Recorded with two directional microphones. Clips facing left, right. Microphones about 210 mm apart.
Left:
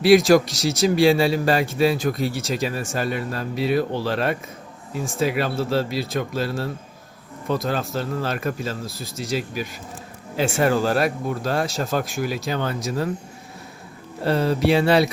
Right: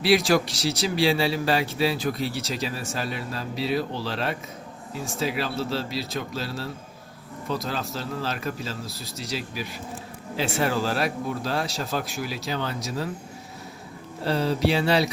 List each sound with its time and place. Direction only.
0.0 s a man's voice: 45° left (ahead or behind)
14.3 s a man's voice: 55° left (ahead or behind)